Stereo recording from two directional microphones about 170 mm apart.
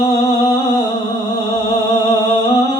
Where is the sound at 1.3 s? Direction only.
25° left (ahead or behind).